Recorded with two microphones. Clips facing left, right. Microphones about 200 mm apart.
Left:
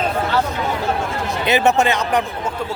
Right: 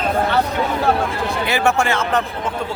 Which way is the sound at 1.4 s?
20° left (ahead or behind).